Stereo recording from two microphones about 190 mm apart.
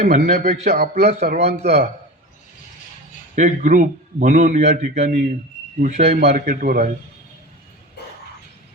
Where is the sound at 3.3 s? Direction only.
40° right (ahead or behind).